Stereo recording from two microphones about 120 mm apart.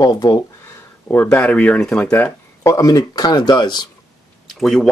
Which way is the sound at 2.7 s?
30° left (ahead or behind).